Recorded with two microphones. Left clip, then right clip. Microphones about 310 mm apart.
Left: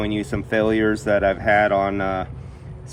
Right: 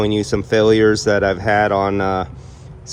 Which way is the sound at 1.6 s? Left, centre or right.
Centre.